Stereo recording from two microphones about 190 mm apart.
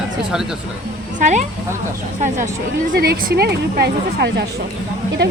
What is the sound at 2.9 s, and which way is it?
Speech, 55° right (ahead or behind).